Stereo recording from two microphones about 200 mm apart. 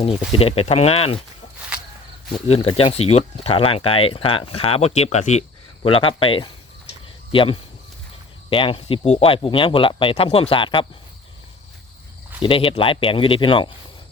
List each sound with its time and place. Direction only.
0.3 s speech: 30° left (ahead or behind)
2.3 s speech: 30° left (ahead or behind)
12.4 s speech: 25° left (ahead or behind)